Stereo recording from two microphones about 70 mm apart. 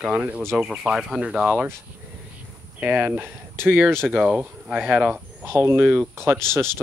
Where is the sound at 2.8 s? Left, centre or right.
Right.